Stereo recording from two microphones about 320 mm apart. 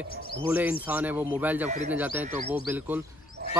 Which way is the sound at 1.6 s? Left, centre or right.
Right.